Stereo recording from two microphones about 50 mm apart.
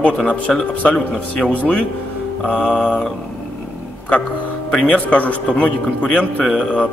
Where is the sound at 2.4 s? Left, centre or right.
Left.